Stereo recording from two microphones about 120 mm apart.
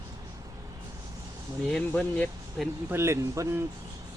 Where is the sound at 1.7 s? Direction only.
10° left (ahead or behind).